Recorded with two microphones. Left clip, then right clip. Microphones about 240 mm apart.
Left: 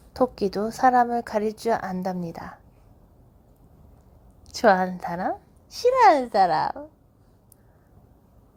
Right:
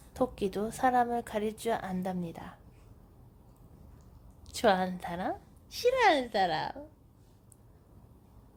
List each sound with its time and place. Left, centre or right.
0.1 s a woman's voice: centre
4.4 s a woman's voice: centre